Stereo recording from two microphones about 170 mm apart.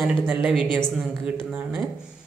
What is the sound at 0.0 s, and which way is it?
Speech, 5° right (ahead or behind).